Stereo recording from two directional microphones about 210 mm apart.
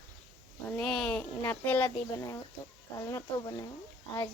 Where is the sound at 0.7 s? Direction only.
Centre (ahead or behind).